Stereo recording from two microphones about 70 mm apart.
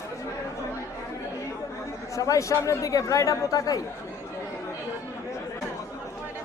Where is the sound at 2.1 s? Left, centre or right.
Left.